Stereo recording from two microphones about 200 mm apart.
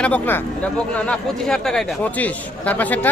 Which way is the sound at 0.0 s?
10° left (ahead or behind).